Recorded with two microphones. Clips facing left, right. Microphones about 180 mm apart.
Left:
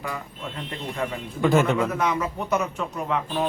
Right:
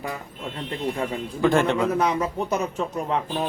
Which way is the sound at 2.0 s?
35° right (ahead or behind).